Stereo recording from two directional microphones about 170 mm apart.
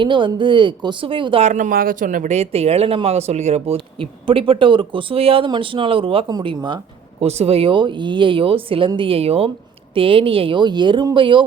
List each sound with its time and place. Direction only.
0.0 s speech: 30° right (ahead or behind)
1.5 s speech: 50° right (ahead or behind); by 6.7 s 30° right (ahead or behind)
7.2 s speech: 40° right (ahead or behind)